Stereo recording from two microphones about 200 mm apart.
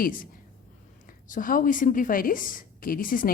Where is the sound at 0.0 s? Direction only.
45° left (ahead or behind).